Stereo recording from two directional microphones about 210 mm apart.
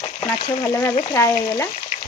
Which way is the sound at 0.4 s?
15° left (ahead or behind).